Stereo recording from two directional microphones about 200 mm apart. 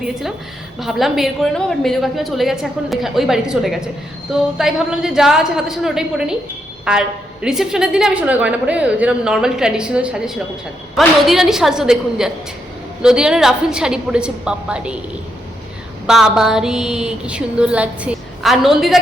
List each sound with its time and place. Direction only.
0.0 s a woman's voice: centre (ahead or behind)
16.0 s a woman's voice: 5° right (ahead or behind)